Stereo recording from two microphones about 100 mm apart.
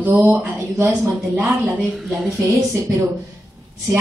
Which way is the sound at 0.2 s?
20° right (ahead or behind).